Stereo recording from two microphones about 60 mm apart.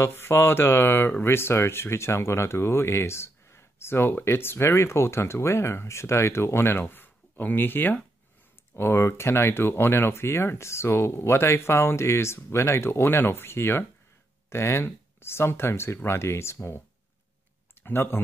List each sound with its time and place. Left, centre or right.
0.0 s speech: left
17.8 s speech: left